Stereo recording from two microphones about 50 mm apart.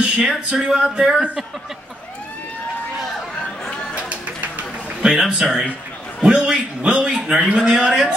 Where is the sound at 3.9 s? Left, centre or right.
Right.